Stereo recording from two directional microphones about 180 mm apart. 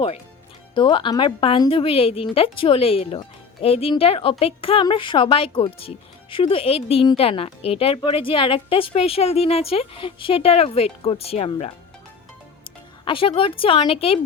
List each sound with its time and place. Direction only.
0.7 s speech: 25° left (ahead or behind)
13.1 s speech: 30° left (ahead or behind)